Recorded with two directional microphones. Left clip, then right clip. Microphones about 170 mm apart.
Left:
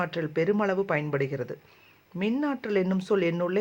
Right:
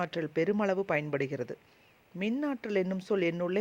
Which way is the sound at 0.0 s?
50° right (ahead or behind).